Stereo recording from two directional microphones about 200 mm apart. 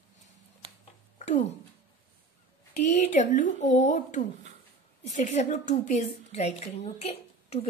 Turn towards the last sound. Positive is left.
turn(degrees=30)  # may be behind; listen again after turning